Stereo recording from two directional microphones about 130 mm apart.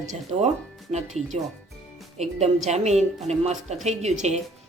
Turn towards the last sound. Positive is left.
turn(degrees=-60)  # may be behind; listen again after turning